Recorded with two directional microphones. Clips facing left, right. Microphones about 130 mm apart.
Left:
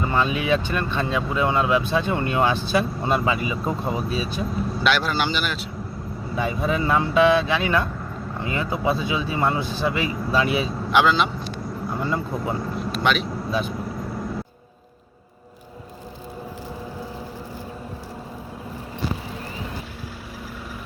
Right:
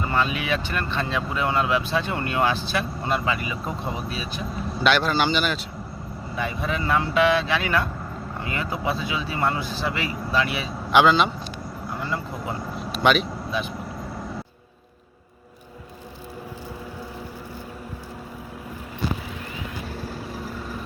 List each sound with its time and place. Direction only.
0.0 s speech: 20° left (ahead or behind)
4.8 s speech: centre (ahead or behind)
6.3 s speech: 20° left (ahead or behind)
10.9 s speech: centre (ahead or behind)
11.9 s speech: 20° left (ahead or behind)
12.6 s vehicle: centre (ahead or behind)